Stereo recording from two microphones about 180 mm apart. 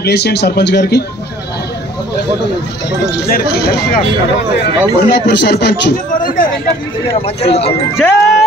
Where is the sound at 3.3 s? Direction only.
60° left (ahead or behind).